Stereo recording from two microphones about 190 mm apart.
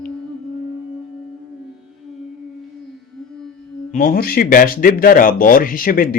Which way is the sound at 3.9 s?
45° left (ahead or behind).